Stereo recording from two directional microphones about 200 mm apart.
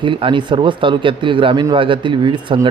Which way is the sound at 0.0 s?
25° right (ahead or behind).